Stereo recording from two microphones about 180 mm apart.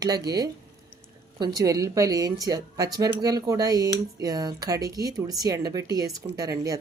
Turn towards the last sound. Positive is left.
turn(degrees=-20)  # may be behind; listen again after turning